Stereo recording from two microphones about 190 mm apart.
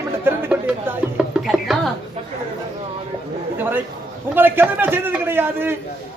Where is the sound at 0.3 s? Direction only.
10° right (ahead or behind).